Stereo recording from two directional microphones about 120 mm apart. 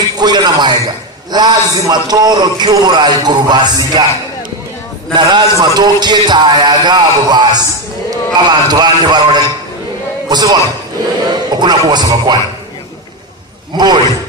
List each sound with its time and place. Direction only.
0.2 s a sound: 35° right (ahead or behind)
1.3 s a man's voice: 35° right (ahead or behind)
5.1 s a man's voice: 40° right (ahead or behind)